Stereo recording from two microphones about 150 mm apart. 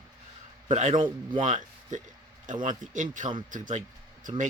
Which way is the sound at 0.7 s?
50° right (ahead or behind).